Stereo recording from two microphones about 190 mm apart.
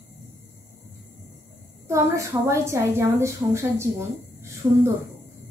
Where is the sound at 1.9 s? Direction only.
15° right (ahead or behind).